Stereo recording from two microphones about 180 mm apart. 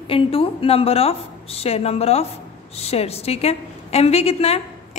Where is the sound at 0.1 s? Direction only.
30° left (ahead or behind).